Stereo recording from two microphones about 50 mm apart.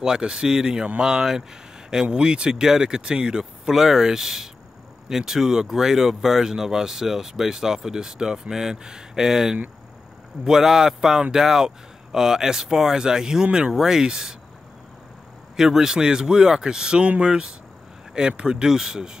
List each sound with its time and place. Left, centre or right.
0.0 s speech: centre
15.5 s speech: centre